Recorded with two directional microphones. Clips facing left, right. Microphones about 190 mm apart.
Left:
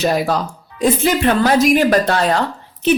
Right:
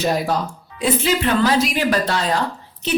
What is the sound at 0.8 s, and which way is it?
A woman's voice, 50° left (ahead or behind).